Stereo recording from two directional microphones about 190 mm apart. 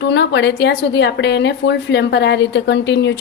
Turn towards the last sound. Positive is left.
turn(degrees=65)  # may be behind; listen again after turning